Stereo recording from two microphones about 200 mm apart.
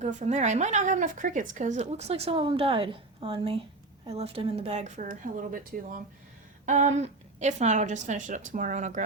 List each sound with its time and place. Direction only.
0.0 s speech: 35° right (ahead or behind)